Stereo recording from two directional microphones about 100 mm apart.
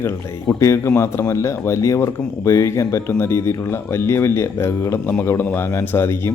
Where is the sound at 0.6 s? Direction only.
30° left (ahead or behind).